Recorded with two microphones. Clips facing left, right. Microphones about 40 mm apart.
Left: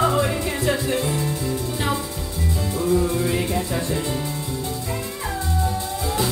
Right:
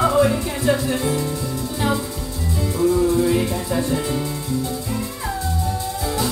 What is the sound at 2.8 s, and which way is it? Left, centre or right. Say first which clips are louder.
Music: right 4 dB; left.